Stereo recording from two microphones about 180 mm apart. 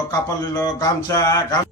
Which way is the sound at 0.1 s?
20° left (ahead or behind).